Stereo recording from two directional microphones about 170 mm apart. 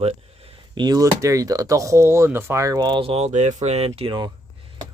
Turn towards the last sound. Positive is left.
turn(degrees=-30)  # may be behind; listen again after turning